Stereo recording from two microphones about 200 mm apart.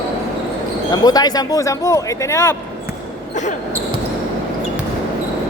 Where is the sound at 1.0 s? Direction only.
20° left (ahead or behind).